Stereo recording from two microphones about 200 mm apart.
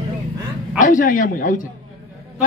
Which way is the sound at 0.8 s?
40° left (ahead or behind).